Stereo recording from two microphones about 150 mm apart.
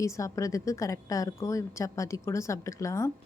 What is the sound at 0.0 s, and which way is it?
A woman's voice, 20° left (ahead or behind).